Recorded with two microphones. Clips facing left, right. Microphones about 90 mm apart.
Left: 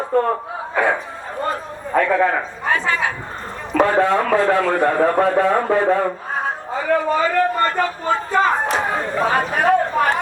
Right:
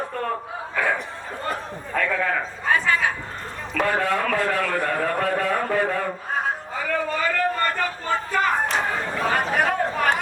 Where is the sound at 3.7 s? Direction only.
25° left (ahead or behind).